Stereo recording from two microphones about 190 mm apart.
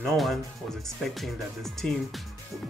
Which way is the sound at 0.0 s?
Centre (ahead or behind).